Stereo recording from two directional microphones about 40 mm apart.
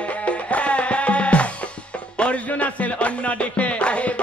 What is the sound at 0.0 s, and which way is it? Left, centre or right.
Music, left.